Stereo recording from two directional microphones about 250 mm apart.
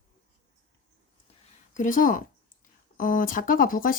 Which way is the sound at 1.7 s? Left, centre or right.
Left.